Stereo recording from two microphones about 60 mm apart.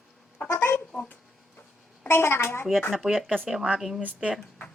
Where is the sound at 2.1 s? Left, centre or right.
Left.